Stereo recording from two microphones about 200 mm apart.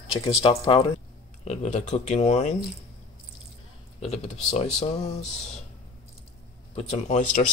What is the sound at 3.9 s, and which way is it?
Speech, 30° left (ahead or behind).